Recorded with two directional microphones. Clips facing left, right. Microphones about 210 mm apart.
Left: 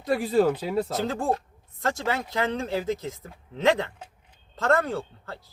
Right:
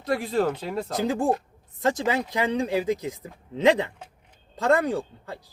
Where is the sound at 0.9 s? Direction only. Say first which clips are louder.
Right 3 dB; 15° right (ahead or behind).